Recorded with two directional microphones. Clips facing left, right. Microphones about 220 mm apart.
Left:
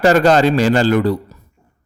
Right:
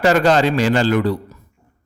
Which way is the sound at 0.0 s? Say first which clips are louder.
Left 3 dB; 40° left (ahead or behind).